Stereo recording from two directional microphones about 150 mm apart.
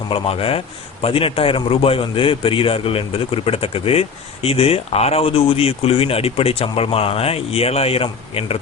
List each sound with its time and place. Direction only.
0.1 s speech: 40° left (ahead or behind)